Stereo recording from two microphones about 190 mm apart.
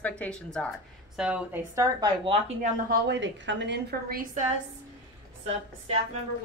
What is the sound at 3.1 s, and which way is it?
A woman's voice, 70° right (ahead or behind).